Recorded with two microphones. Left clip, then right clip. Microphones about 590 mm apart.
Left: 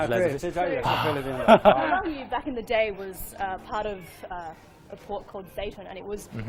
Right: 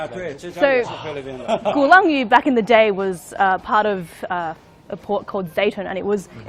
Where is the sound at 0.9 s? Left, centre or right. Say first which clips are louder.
Left 3 dB; left.